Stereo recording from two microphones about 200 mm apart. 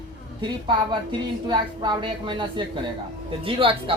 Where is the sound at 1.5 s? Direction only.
20° right (ahead or behind).